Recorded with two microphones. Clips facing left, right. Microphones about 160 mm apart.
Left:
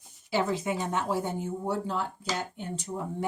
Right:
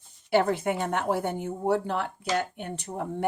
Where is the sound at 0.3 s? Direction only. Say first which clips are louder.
Right 4 dB; 60° right (ahead or behind).